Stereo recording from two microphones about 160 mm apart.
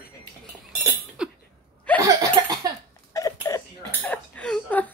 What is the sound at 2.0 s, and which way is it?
Laughter, 20° right (ahead or behind).